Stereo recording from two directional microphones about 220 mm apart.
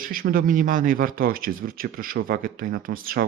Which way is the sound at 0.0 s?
40° right (ahead or behind).